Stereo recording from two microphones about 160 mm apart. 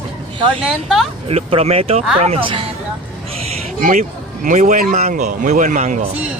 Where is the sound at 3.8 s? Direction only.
55° right (ahead or behind).